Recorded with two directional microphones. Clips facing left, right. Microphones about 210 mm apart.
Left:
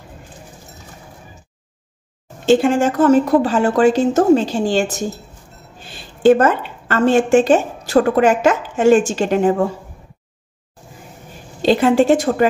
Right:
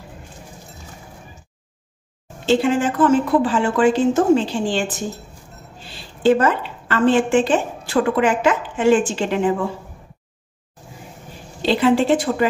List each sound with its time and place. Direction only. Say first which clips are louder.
2.4 s speech: left 4 dB; 45° left (ahead or behind)
6.2 s a woman's voice: left 4 dB; 50° left (ahead or behind)
11.6 s a woman's voice: left 3 dB; 45° left (ahead or behind)